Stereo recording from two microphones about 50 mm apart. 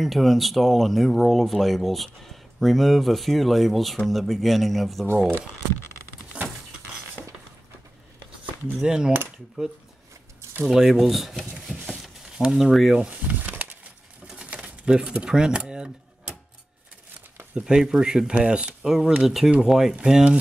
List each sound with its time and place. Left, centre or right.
0.0 s speech: centre
8.7 s speech: centre
10.6 s speech: centre
11.6 s a sound: centre
12.4 s speech: centre
12.9 s speech: centre
13.3 s a sound: right
14.2 s pigeon: centre
15.2 s speech: centre
15.7 s typewriter: centre
17.6 s speech: centre
18.9 s speech: centre